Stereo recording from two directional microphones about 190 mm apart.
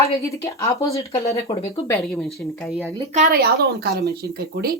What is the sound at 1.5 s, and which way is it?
Speech, 30° left (ahead or behind).